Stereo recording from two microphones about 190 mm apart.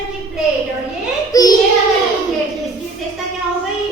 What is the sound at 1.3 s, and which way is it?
Child singing, 20° left (ahead or behind).